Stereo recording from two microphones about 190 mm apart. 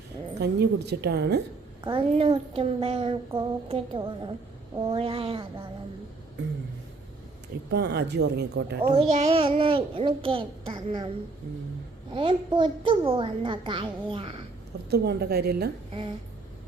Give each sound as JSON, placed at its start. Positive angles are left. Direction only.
{"t": 0.3, "sound": "a woman's voice", "side_deg": -60}
{"t": 1.8, "sound": "a woman's voice", "side_deg": -30}
{"t": 7.7, "sound": "a woman's voice", "side_deg": -60}
{"t": 9.0, "sound": "a woman's voice", "side_deg": -35}
{"t": 12.1, "sound": "a woman's voice", "side_deg": -25}
{"t": 14.8, "sound": "a woman's voice", "side_deg": -55}